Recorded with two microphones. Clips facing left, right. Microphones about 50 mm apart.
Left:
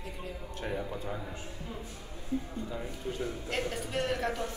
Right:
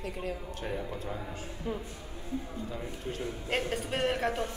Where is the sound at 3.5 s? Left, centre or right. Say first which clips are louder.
Right 6 dB; right.